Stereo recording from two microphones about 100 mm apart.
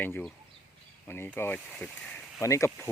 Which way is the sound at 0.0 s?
15° left (ahead or behind).